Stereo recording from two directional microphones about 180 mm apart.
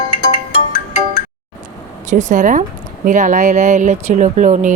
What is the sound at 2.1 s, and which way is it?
A woman's voice, 45° right (ahead or behind).